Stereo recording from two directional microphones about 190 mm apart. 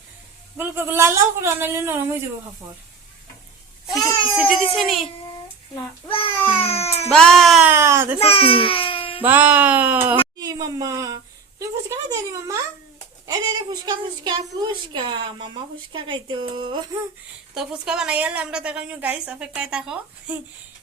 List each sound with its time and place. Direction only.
0.5 s speech: 10° right (ahead or behind)
3.8 s babbling: centre (ahead or behind)
4.4 s a woman's voice: centre (ahead or behind)
5.7 s a child's voice: 25° left (ahead or behind)
6.6 s baby cry: 30° left (ahead or behind)
7.1 s speech: 5° left (ahead or behind); by 8.2 s 10° right (ahead or behind)
8.2 s babbling: 30° left (ahead or behind)
9.2 s speech: 10° right (ahead or behind)
10.4 s a woman's voice: 20° right (ahead or behind)
17.5 s a woman's voice: 5° right (ahead or behind)